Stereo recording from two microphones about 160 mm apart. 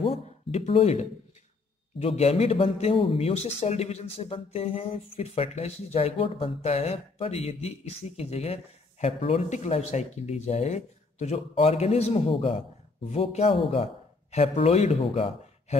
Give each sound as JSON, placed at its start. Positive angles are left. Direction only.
{"t": 0.0, "sound": "a man's voice", "side_deg": 40}